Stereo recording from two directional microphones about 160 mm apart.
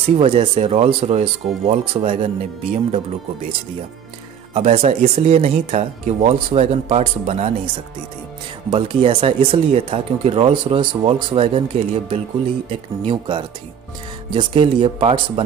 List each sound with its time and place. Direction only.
0.0 s speech: 35° right (ahead or behind)
4.6 s speech: 40° right (ahead or behind)
8.6 s speech: 35° right (ahead or behind)